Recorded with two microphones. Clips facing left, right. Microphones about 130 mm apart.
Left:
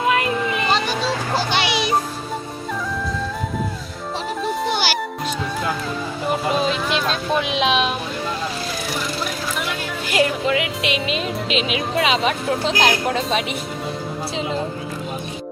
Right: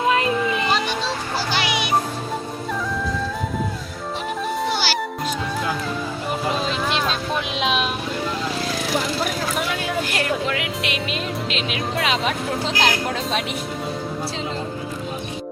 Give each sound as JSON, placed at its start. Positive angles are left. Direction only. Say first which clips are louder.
{"t": 0.1, "sound": "music", "louder": "right 1 dB", "side_deg": -30}
{"t": 1.5, "sound": "music", "louder": "left 2 dB", "side_deg": 20}
{"t": 4.7, "sound": "music", "louder": "left 1 dB", "side_deg": 15}
{"t": 6.6, "sound": "music", "louder": "left 2 dB", "side_deg": 0}
{"t": 10.1, "sound": "music", "louder": "left 4 dB", "side_deg": 5}